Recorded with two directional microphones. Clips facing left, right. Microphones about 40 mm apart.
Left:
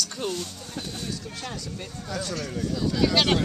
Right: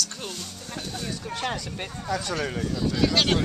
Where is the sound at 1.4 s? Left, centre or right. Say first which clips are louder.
Right 5 dB; right.